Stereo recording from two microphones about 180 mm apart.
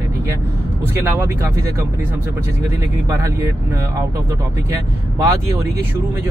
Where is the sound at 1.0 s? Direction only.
15° right (ahead or behind).